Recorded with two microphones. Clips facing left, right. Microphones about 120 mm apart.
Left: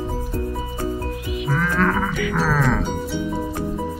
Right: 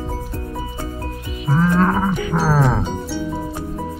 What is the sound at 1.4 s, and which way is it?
Cattle, 20° right (ahead or behind).